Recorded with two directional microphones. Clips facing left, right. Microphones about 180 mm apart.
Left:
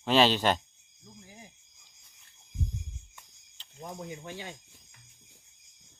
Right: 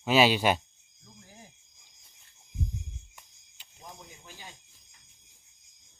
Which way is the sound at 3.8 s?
70° left (ahead or behind).